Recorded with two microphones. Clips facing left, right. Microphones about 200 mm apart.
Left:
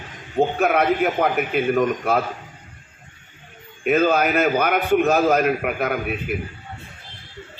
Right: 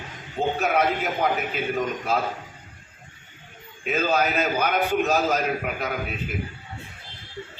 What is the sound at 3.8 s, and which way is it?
A man's voice, 55° left (ahead or behind).